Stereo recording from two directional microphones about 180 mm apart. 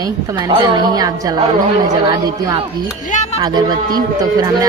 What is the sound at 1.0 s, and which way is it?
A woman's voice, 20° right (ahead or behind).